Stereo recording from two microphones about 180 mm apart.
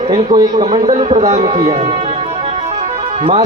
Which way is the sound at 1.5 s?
35° right (ahead or behind).